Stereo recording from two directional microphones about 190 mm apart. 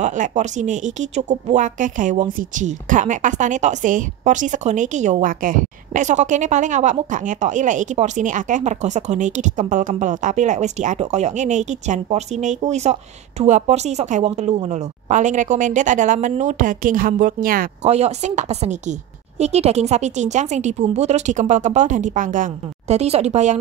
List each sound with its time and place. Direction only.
0.0 s speech: 40° right (ahead or behind)
17.8 s speech: 35° right (ahead or behind)